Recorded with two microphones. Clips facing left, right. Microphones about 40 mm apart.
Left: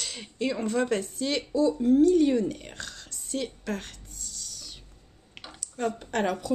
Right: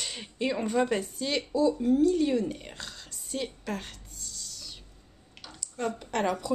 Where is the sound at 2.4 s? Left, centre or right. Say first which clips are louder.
Left 2 dB; centre.